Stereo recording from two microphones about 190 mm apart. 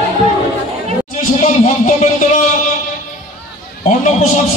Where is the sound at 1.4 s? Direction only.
40° left (ahead or behind).